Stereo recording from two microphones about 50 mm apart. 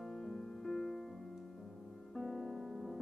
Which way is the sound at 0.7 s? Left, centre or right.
Centre.